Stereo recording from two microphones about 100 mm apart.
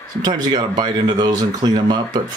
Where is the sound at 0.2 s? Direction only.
45° right (ahead or behind).